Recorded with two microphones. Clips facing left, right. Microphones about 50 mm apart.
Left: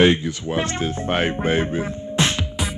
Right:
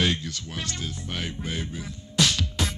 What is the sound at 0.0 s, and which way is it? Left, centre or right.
Music, left.